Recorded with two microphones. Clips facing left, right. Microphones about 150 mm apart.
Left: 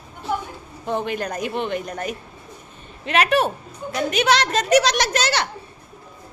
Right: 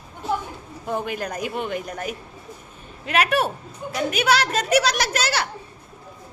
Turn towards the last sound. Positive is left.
turn(degrees=-5)  # may be behind; listen again after turning